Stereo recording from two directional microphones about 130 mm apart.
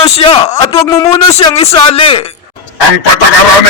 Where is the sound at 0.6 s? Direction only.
25° left (ahead or behind).